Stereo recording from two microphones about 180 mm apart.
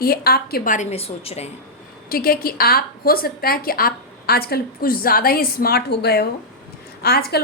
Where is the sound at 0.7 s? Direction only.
35° left (ahead or behind).